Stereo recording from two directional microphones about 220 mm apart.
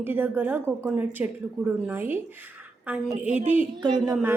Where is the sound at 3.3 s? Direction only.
30° right (ahead or behind).